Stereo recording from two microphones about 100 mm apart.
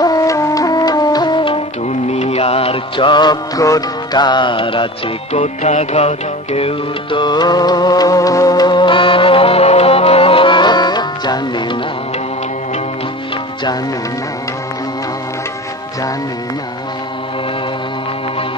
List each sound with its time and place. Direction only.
0.0 s music: 35° left (ahead or behind); by 7.2 s 85° left
7.2 s music: 45° left (ahead or behind)